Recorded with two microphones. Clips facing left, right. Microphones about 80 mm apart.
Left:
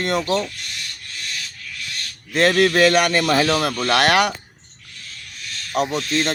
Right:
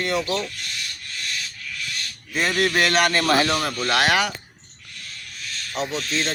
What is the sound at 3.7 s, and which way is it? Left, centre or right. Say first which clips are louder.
Speech: left 3 dB; left.